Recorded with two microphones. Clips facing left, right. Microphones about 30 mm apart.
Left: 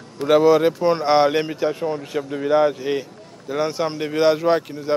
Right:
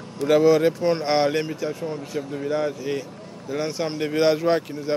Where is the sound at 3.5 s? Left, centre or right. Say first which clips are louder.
Left 4 dB; centre.